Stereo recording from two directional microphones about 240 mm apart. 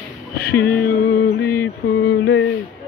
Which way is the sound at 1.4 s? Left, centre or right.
Centre.